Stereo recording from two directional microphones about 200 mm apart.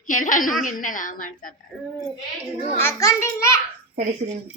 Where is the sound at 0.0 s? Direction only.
40° left (ahead or behind).